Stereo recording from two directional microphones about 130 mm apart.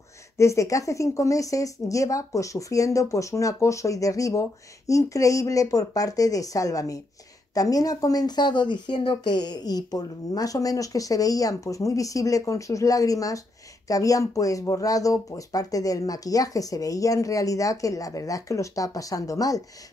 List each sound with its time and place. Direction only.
0.4 s a woman's voice: 25° left (ahead or behind)